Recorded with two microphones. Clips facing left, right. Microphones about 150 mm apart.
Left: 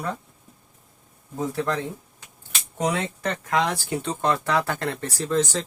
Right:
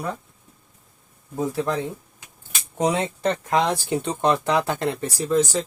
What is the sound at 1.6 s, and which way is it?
Speech, 15° right (ahead or behind).